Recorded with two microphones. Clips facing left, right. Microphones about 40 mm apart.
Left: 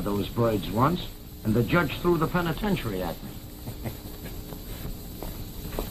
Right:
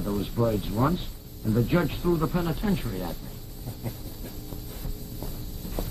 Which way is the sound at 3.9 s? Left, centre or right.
Left.